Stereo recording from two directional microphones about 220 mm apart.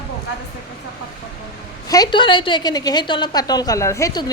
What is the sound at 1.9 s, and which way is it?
A woman's voice, 20° left (ahead or behind).